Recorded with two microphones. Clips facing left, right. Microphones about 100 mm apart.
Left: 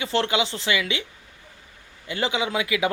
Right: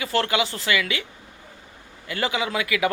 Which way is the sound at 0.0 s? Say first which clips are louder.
Even; 20° left (ahead or behind).